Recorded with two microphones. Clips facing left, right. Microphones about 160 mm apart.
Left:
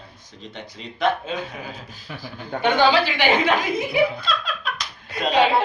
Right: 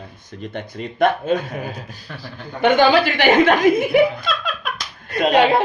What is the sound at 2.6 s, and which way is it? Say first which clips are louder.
Speech: right 4 dB; 45° right (ahead or behind).